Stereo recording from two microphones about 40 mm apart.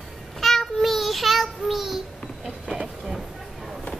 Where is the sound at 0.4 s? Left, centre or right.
Centre.